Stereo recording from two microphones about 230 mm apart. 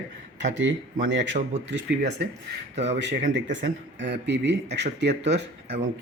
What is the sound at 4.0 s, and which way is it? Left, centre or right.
Speech, right.